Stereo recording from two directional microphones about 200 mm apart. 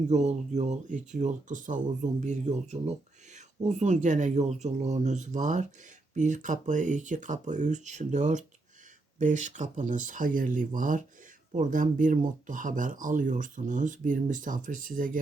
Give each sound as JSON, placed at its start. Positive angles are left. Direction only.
{"t": 0.1, "sound": "speech", "side_deg": -35}